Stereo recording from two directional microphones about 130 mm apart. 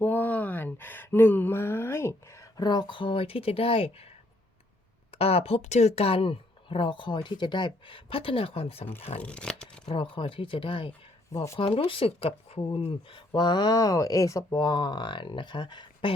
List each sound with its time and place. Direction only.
0.0 s speech: 15° left (ahead or behind); by 4.1 s 50° left (ahead or behind)
5.1 s speech: 50° left (ahead or behind)
9.1 s speech: 10° left (ahead or behind)
9.8 s speech: 40° left (ahead or behind)
11.3 s speech: 25° left (ahead or behind)
11.6 s speech: 45° left (ahead or behind)